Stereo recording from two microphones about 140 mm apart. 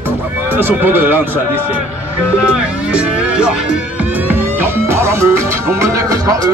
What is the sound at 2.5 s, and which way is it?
Speech, 5° right (ahead or behind).